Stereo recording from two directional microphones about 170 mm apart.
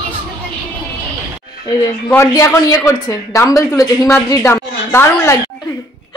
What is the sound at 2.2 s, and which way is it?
Speech, 15° left (ahead or behind).